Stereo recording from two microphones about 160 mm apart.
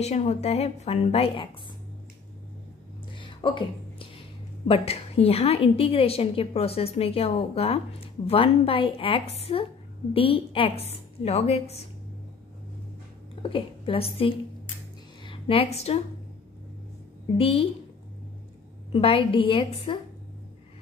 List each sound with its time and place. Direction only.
0.0 s a woman's voice: 40° left (ahead or behind)
3.2 s a sound: 30° left (ahead or behind)
4.6 s a woman's voice: 40° left (ahead or behind)
13.4 s a woman's voice: 35° left (ahead or behind)
17.4 s a woman's voice: 35° left (ahead or behind)
18.9 s a woman's voice: 35° left (ahead or behind)